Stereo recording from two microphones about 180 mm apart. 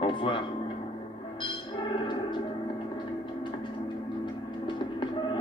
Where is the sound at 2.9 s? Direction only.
25° left (ahead or behind).